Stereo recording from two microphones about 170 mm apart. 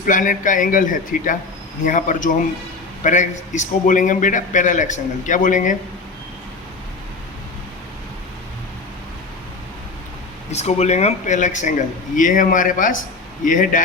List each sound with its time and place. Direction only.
0.0 s a man's voice: 50° left (ahead or behind)
10.5 s a man's voice: 40° left (ahead or behind)